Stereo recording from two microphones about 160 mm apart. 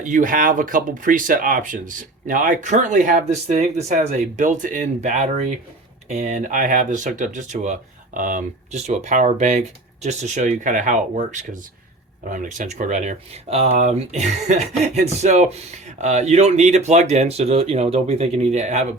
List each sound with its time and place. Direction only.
0.0 s speech: 55° right (ahead or behind)